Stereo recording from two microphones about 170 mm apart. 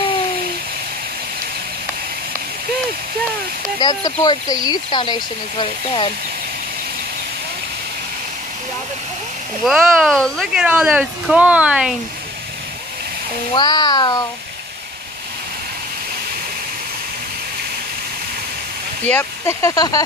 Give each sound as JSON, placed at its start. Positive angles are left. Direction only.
{"t": 3.8, "sound": "speech", "side_deg": 25}
{"t": 9.7, "sound": "speech", "side_deg": 0}
{"t": 13.6, "sound": "speech", "side_deg": 25}
{"t": 19.0, "sound": "speech", "side_deg": 15}